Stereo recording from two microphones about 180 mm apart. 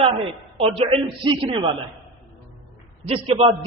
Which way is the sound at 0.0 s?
30° right (ahead or behind).